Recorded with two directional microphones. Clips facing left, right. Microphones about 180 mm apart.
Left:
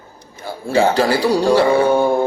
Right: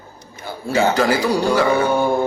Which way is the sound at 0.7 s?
30° left (ahead or behind).